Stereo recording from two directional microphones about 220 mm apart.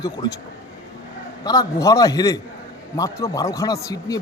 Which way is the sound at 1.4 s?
15° left (ahead or behind).